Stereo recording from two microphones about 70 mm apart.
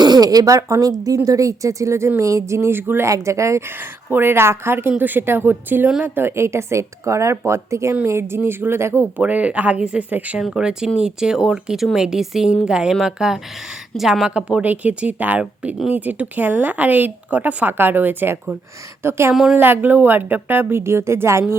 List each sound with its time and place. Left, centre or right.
0.0 s speech: right
3.1 s speech: right
3.8 s a woman's voice: right
9.1 s a woman's voice: right
10.4 s a woman's voice: centre; by 19.3 s right
19.3 s a woman's voice: centre
19.5 s a woman's voice: right